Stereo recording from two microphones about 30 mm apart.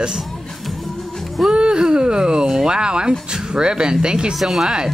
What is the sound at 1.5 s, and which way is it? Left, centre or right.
Speech, right.